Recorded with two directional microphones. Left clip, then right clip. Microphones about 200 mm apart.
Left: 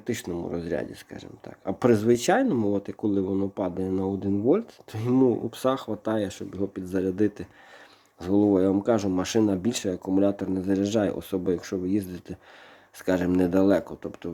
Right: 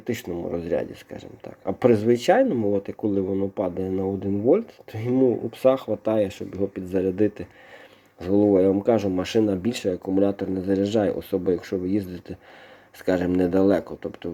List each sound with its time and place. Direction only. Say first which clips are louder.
0.0 s speech: right 2 dB; 20° left (ahead or behind)